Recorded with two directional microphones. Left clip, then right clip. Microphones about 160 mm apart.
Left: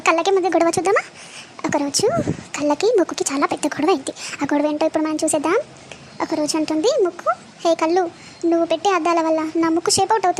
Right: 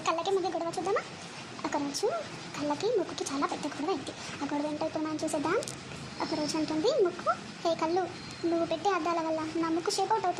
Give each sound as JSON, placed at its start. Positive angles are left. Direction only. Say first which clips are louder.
{"t": 0.0, "sound": "speech", "louder": "left 13 dB", "side_deg": 45}